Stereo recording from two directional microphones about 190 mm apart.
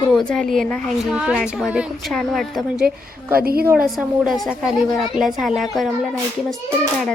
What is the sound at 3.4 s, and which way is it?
Speech, 50° right (ahead or behind).